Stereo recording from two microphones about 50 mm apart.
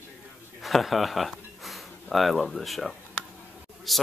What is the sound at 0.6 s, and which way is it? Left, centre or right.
Speech, centre.